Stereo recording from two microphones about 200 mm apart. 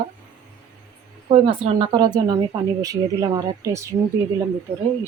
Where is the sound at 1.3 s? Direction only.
30° right (ahead or behind).